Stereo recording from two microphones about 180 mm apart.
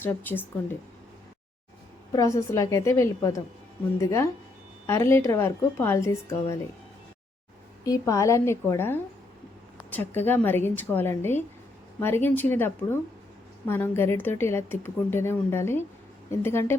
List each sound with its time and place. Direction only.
0.0 s a woman's voice: 10° left (ahead or behind)
2.1 s a woman's voice: 20° left (ahead or behind)
7.9 s a woman's voice: 15° left (ahead or behind)